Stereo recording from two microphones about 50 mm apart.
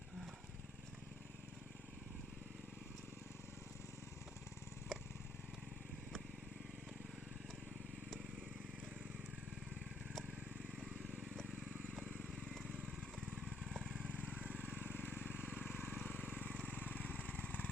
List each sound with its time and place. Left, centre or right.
4.9 s vehicle: centre
12.5 s vehicle: centre
14.1 s vehicle: left
14.3 s vehicle: right
14.8 s vehicle: left